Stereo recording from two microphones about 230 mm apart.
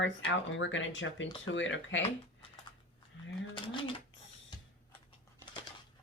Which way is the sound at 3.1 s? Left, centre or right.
Left.